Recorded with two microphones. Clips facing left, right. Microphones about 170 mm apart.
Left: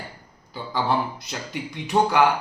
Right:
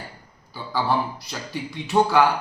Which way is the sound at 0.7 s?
20° left (ahead or behind).